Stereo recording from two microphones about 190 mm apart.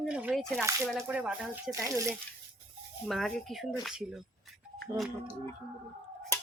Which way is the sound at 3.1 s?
Centre (ahead or behind).